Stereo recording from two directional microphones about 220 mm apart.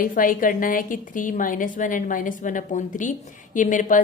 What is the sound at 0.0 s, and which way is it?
A woman's voice, 40° left (ahead or behind).